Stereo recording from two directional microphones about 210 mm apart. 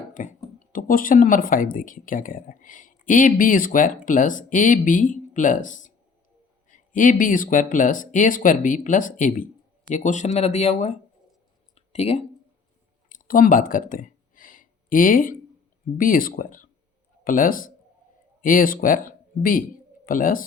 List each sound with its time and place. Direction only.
0.1 s speech: 35° left (ahead or behind)
11.7 s clicking: 30° left (ahead or behind)
13.1 s a sound: 40° left (ahead or behind)
16.0 s speech: 40° left (ahead or behind)